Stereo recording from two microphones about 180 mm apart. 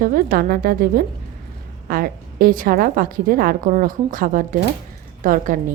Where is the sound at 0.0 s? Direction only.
50° right (ahead or behind).